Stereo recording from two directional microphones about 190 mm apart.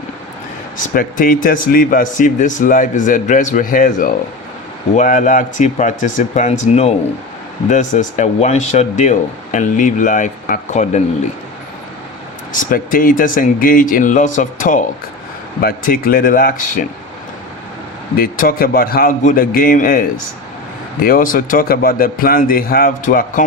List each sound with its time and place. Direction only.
0.9 s speech: 45° left (ahead or behind)
12.7 s speech: 45° left (ahead or behind)
18.2 s speech: 50° left (ahead or behind)